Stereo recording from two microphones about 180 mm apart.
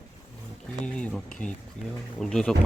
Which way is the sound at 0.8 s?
5° left (ahead or behind).